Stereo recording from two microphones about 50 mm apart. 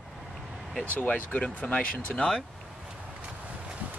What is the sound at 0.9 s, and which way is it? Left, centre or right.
Speech, left.